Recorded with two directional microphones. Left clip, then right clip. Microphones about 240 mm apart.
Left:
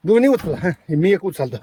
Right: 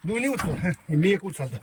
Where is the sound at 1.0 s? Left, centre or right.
Centre.